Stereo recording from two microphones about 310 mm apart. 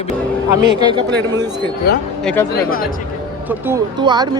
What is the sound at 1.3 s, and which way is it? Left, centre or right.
Speech, centre.